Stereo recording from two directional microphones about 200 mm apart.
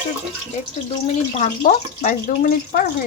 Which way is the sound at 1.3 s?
40° left (ahead or behind).